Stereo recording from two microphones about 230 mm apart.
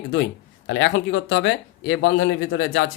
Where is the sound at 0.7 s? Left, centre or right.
Left.